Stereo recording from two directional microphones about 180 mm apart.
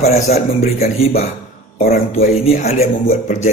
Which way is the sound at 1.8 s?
55° left (ahead or behind).